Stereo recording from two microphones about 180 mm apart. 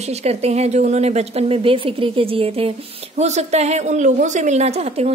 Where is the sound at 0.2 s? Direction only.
35° right (ahead or behind).